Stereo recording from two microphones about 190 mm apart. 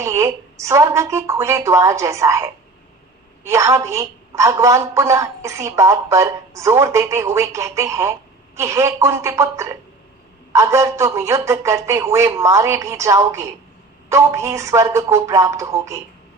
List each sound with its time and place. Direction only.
0.0 s a woman's voice: 15° right (ahead or behind)